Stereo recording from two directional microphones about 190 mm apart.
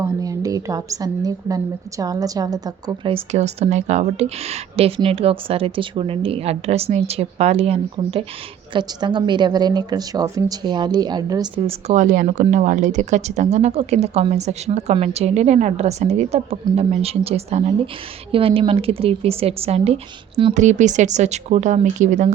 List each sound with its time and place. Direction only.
0.0 s a woman's voice: 20° right (ahead or behind); by 22.3 s 40° right (ahead or behind)